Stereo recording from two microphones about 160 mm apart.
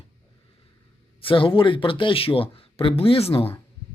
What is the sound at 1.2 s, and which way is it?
Speech, 35° left (ahead or behind).